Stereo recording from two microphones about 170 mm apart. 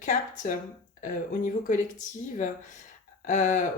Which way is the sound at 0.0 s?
45° left (ahead or behind).